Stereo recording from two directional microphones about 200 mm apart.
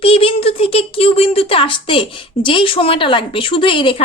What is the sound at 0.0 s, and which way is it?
A woman's voice, 30° left (ahead or behind).